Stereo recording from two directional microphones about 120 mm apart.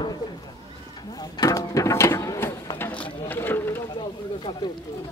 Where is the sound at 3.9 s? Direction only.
40° left (ahead or behind).